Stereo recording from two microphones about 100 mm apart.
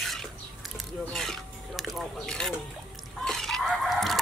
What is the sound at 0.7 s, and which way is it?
Speech, 5° left (ahead or behind).